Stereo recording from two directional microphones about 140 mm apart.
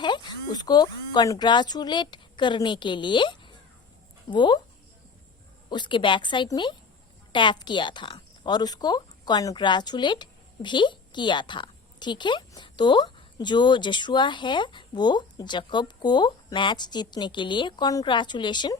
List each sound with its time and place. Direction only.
0.0 s a sound: 35° left (ahead or behind)
0.5 s a woman's voice: 30° left (ahead or behind)
5.6 s a woman's voice: 35° left (ahead or behind)